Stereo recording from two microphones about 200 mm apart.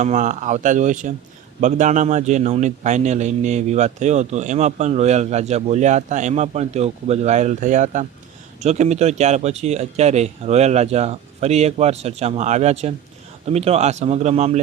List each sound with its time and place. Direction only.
0.0 s a man's voice: 35° right (ahead or behind)